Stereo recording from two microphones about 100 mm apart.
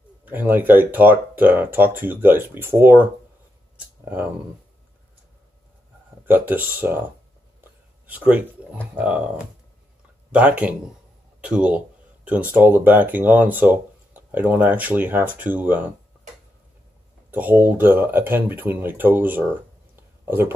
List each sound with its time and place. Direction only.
0.2 s speech: 20° right (ahead or behind)
6.2 s speech: 20° right (ahead or behind)
7.6 s a sound: 20° right (ahead or behind)
8.9 s speech: 15° right (ahead or behind)
10.3 s speech: 15° right (ahead or behind)
17.3 s speech: 20° right (ahead or behind)
20.0 s a sound: 20° right (ahead or behind)